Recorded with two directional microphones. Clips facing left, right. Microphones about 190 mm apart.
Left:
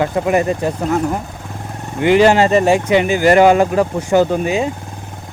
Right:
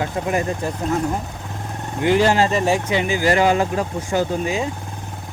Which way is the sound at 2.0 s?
75° left (ahead or behind).